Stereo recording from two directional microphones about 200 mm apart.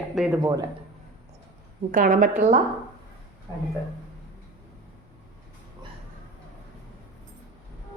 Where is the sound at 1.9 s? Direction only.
40° right (ahead or behind).